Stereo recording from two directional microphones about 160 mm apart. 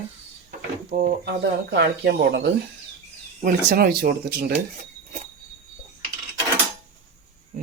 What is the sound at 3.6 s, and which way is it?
Speech, 65° right (ahead or behind).